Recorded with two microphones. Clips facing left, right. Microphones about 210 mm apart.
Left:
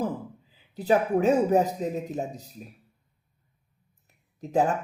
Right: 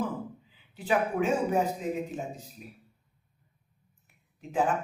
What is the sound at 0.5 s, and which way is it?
A woman's voice, 40° left (ahead or behind).